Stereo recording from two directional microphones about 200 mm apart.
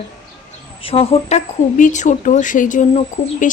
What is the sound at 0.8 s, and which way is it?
A woman's voice, 30° left (ahead or behind).